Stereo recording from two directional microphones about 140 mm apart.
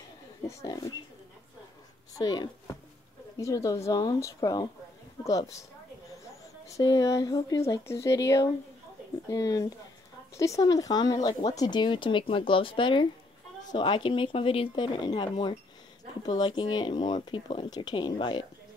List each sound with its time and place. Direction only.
0.5 s speech: 25° left (ahead or behind)
2.1 s speech: 30° left (ahead or behind)
6.7 s speech: 25° left (ahead or behind)